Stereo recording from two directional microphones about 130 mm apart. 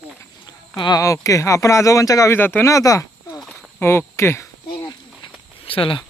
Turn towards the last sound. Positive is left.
turn(degrees=45)  # may be behind; listen again after turning